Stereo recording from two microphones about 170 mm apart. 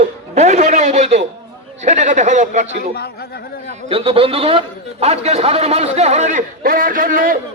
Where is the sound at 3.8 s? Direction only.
35° right (ahead or behind).